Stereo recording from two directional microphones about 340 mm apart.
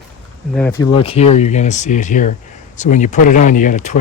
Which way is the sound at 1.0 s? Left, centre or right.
Centre.